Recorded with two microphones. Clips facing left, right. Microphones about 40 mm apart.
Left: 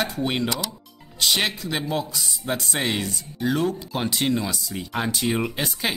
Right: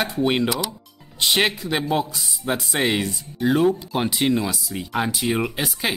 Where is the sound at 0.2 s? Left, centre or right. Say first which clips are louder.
Right 4 dB; centre.